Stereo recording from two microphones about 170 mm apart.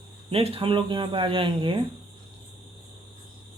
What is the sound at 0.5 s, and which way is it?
Speech, 30° right (ahead or behind).